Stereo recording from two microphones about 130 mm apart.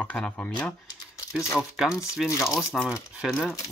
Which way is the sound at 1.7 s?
5° right (ahead or behind).